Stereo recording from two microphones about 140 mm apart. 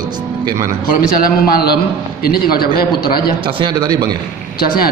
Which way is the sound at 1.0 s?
90° left.